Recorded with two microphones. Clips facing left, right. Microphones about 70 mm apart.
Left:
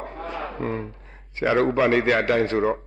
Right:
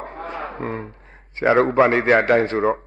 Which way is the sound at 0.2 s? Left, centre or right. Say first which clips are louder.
Right 1 dB; right.